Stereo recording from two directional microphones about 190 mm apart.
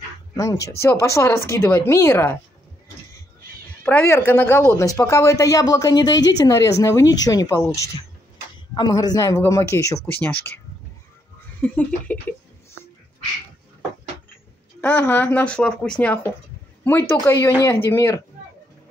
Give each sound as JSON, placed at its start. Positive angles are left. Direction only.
{"t": 0.3, "sound": "a sound", "side_deg": 15}
{"t": 0.7, "sound": "speech", "side_deg": 15}
{"t": 3.8, "sound": "speech", "side_deg": 10}
{"t": 11.6, "sound": "speech", "side_deg": 10}
{"t": 14.8, "sound": "speech", "side_deg": 10}